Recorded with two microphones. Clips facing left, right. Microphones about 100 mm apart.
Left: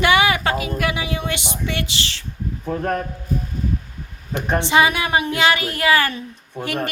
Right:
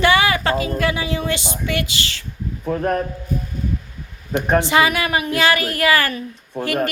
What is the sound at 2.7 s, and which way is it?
Speech, 30° right (ahead or behind).